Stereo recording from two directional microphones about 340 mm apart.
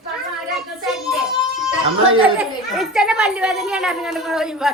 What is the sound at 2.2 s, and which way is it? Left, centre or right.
A child's voice, centre.